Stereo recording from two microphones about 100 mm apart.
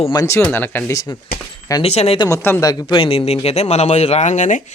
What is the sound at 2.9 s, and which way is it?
Speech, 60° left (ahead or behind).